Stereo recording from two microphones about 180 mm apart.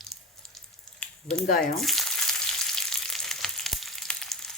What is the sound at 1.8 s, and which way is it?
Speech, centre (ahead or behind).